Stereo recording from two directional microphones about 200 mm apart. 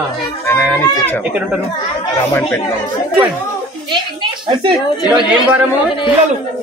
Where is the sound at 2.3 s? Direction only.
10° left (ahead or behind).